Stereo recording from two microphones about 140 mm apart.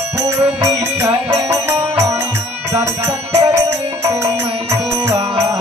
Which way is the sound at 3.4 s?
20° right (ahead or behind).